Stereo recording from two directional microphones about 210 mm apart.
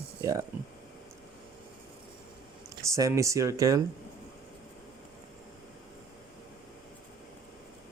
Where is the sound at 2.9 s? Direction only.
15° right (ahead or behind).